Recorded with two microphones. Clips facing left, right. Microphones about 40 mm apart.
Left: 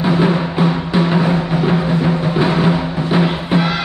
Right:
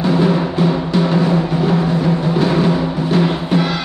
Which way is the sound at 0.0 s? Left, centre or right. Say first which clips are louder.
Even; centre.